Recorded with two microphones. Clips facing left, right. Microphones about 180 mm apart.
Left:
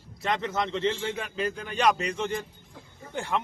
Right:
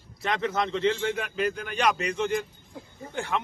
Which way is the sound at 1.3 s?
25° left (ahead or behind).